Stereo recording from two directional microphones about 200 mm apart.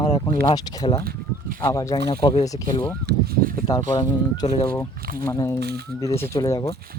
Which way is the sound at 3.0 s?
50° right (ahead or behind).